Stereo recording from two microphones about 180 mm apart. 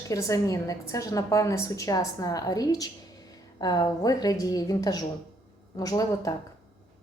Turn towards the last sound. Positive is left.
turn(degrees=20)  # may be behind; listen again after turning